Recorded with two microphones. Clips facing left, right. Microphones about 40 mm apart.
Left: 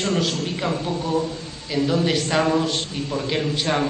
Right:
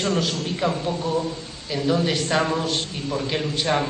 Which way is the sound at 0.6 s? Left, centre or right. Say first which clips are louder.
Right 2 dB; left.